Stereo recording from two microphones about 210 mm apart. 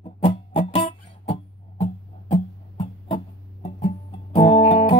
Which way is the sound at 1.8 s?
25° left (ahead or behind).